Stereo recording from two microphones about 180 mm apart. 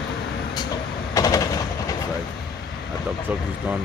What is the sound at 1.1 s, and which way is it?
Train, 20° left (ahead or behind).